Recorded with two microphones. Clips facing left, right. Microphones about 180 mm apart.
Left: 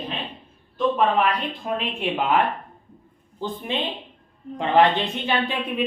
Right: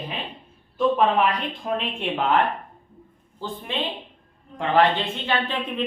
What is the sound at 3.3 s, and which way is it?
A woman's voice, 20° left (ahead or behind).